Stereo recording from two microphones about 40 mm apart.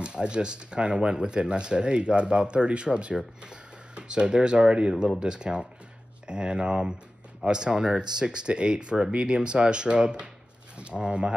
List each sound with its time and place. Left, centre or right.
0.0 s speech: right